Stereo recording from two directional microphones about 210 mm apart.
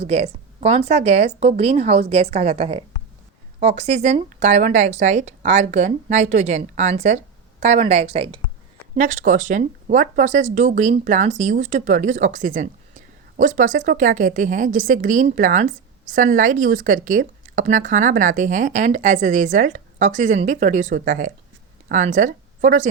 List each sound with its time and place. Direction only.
0.0 s a woman's voice: 30° right (ahead or behind)
9.0 s a woman's voice: 40° right (ahead or behind)